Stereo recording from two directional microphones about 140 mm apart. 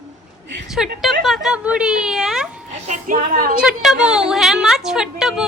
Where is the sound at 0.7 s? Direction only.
Centre (ahead or behind).